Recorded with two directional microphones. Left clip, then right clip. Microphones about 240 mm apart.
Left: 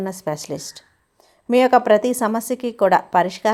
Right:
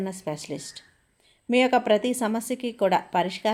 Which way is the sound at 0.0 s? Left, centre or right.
Centre.